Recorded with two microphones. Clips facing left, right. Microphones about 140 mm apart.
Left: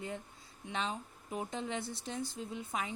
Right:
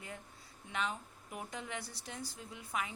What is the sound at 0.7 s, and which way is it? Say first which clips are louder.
A woman's voice: left 1 dB; 30° left (ahead or behind).